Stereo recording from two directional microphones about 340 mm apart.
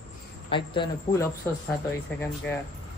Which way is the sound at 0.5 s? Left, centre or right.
Centre.